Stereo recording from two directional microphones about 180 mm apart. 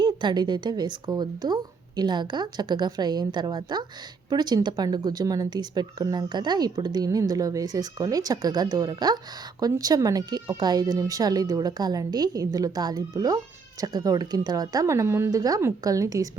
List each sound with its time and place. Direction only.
0.0 s a woman's voice: 25° right (ahead or behind)